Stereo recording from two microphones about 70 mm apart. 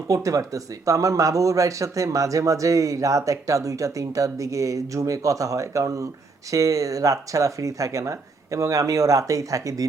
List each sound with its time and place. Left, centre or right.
0.1 s speech: right